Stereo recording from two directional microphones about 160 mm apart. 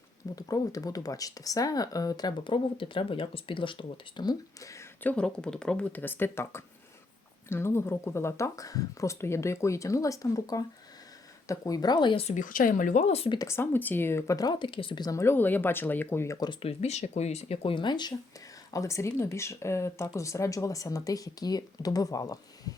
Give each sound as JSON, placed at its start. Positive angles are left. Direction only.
{"t": 0.3, "sound": "speech", "side_deg": 20}
{"t": 5.1, "sound": "speech", "side_deg": 5}
{"t": 12.2, "sound": "speech", "side_deg": 50}
{"t": 13.4, "sound": "speech", "side_deg": 15}